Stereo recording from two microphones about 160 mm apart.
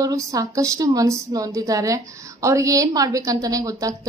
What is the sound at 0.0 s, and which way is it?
A woman's voice, 20° right (ahead or behind).